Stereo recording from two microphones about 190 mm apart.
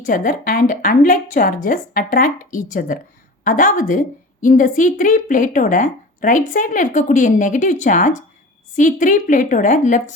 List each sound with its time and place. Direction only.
0.0 s a woman's voice: 45° left (ahead or behind)